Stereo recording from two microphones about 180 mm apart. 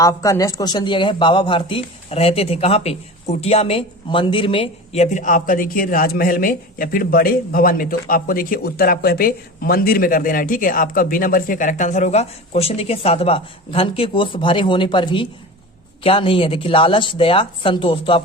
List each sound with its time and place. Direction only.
0.0 s a woman's voice: 20° left (ahead or behind)